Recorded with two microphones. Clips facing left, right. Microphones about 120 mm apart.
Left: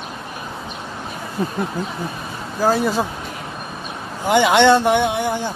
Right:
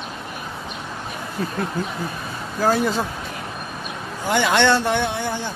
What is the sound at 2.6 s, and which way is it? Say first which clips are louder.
Speech: left 2 dB; 5° left (ahead or behind).